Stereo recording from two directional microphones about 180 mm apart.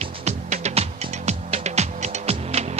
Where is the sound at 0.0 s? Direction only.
40° right (ahead or behind).